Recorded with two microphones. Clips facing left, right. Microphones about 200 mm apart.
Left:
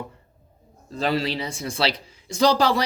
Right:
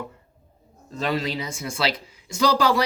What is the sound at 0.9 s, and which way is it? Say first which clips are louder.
Speech: left 2 dB; 30° left (ahead or behind).